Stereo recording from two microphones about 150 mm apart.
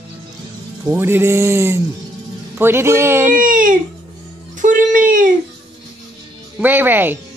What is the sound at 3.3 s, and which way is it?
Speech, 65° right (ahead or behind).